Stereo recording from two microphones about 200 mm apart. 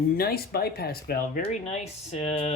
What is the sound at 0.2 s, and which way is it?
A woman's voice, 50° left (ahead or behind).